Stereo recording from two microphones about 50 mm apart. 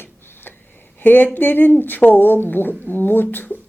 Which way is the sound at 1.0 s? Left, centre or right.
Left.